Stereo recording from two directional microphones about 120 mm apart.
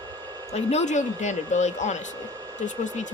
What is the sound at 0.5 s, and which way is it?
Speech, 70° left (ahead or behind).